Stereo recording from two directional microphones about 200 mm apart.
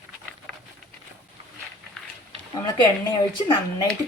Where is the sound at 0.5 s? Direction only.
5° left (ahead or behind).